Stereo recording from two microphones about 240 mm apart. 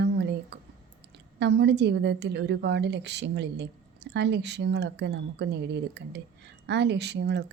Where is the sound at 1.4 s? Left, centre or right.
Right.